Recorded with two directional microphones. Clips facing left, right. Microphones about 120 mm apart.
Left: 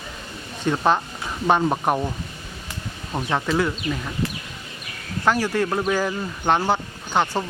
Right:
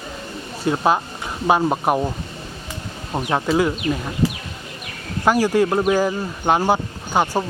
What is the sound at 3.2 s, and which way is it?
Speech, 15° right (ahead or behind).